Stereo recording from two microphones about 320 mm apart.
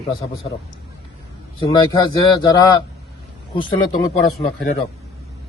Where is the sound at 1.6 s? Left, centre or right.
Centre.